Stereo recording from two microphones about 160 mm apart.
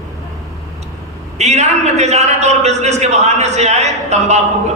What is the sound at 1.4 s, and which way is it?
A man's voice, 45° right (ahead or behind).